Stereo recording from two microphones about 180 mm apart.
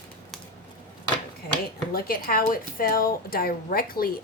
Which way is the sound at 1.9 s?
55° left (ahead or behind).